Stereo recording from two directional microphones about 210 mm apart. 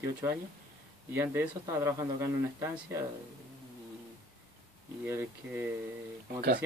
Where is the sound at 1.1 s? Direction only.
10° right (ahead or behind).